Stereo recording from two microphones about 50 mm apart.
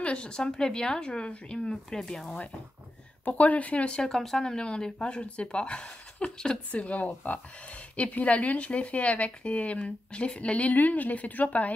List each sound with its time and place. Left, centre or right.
0.0 s speech: left
3.3 s speech: left
4.1 s speech: centre
6.7 s speech: left